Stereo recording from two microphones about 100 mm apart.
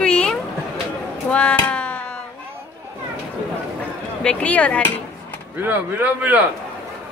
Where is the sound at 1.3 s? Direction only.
10° left (ahead or behind).